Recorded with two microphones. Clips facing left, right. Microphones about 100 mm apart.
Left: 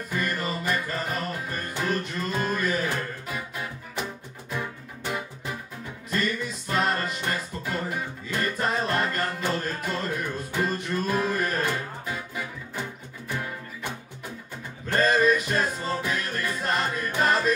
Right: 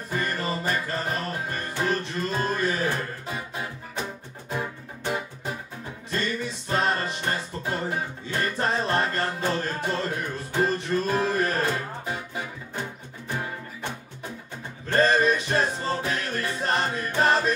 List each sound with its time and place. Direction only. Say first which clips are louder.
0.1 s music: right 1 dB; 30° right (ahead or behind)
15.0 s music: right 1 dB; 30° right (ahead or behind)